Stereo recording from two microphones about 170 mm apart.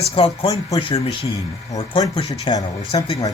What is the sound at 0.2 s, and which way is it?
Speech, 30° left (ahead or behind).